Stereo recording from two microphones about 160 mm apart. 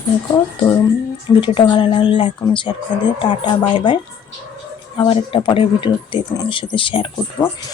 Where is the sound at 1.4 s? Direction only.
30° left (ahead or behind).